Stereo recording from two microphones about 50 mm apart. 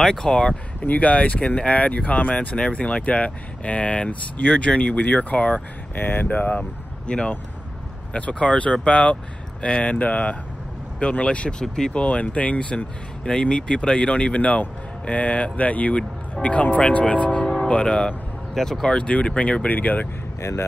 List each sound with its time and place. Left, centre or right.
0.0 s speech: centre
0.7 s speech: left
5.9 s speech: left
7.1 s speech: left
11.6 s speech: centre
11.9 s speech: left